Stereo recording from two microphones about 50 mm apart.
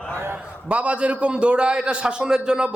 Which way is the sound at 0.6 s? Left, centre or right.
Right.